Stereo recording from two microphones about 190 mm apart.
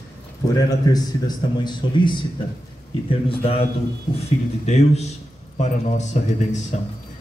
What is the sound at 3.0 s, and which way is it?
Speech, 30° left (ahead or behind).